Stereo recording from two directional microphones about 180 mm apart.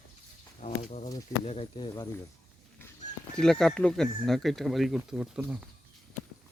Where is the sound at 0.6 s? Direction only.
40° left (ahead or behind).